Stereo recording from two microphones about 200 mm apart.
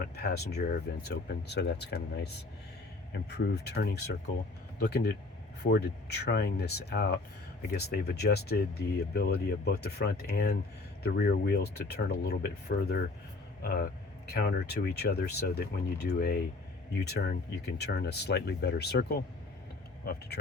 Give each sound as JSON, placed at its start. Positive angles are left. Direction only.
{"t": 0.2, "sound": "speech", "side_deg": 50}